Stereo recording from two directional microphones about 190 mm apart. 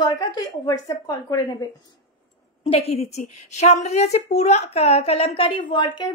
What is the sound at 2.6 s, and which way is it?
A woman's voice, 30° left (ahead or behind).